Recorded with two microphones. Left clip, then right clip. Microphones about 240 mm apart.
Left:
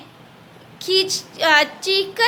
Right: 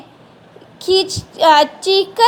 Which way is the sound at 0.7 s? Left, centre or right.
Right.